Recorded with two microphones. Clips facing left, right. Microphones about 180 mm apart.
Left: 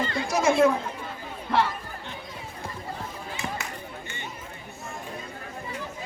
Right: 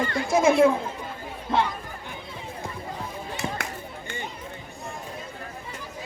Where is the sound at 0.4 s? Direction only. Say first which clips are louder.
Right 2 dB; 15° right (ahead or behind).